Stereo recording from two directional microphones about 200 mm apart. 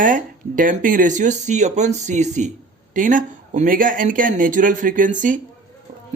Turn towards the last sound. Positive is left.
turn(degrees=-40)  # may be behind; listen again after turning